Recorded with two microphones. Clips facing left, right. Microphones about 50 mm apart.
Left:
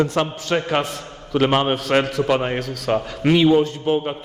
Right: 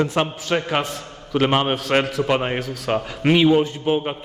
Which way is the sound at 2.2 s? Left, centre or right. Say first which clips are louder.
Left 1 dB; centre.